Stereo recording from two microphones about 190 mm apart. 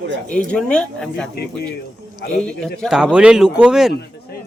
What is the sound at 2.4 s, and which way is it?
Speech, 5° left (ahead or behind).